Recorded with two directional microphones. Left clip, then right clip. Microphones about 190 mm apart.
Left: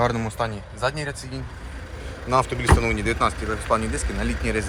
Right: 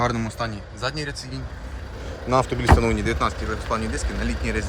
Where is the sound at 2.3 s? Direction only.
20° right (ahead or behind).